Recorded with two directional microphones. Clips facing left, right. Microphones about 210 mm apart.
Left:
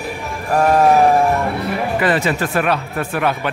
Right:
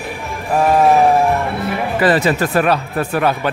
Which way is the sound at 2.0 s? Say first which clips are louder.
Right 5 dB; 35° right (ahead or behind).